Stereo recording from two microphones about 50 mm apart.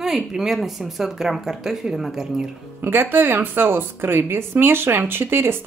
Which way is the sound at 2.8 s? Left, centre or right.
Right.